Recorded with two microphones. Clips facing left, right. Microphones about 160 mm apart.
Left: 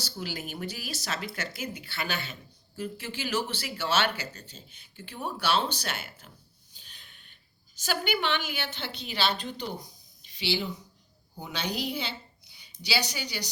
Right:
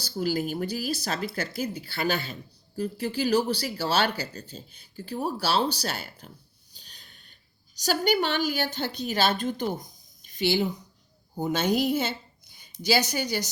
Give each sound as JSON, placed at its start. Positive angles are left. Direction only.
{"t": 0.0, "sound": "speech", "side_deg": -40}
{"t": 6.7, "sound": "a sound", "side_deg": -40}
{"t": 7.8, "sound": "a woman's voice", "side_deg": -40}